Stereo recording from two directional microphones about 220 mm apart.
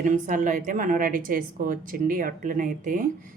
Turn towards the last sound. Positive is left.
turn(degrees=-35)  # may be behind; listen again after turning